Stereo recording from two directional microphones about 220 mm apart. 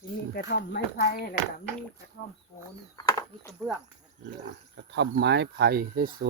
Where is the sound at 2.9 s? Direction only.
15° left (ahead or behind).